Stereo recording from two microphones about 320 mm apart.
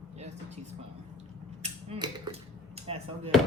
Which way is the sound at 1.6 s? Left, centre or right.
Centre.